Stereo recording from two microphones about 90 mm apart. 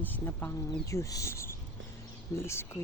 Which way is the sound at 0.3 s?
30° left (ahead or behind).